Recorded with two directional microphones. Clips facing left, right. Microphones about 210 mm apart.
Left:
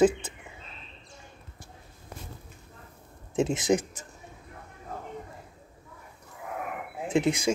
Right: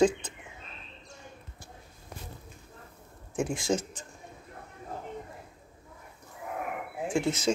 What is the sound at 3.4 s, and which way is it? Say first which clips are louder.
Speech: left 4 dB; 20° left (ahead or behind).